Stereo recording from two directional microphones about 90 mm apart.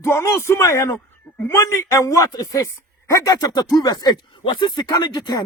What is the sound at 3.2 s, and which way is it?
Speech, 45° left (ahead or behind).